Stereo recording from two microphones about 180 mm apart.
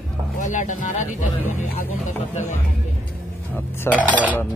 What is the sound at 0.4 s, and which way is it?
Speech, 45° left (ahead or behind).